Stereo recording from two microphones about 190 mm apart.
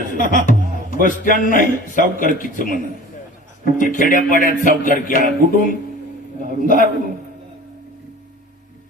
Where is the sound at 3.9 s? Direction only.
45° left (ahead or behind).